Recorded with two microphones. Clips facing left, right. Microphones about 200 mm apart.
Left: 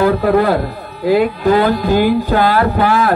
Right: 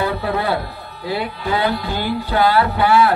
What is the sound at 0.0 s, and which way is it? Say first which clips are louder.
Speech: left 9 dB; 45° left (ahead or behind).